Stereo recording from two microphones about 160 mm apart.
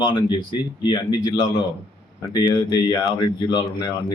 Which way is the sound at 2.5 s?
25° left (ahead or behind).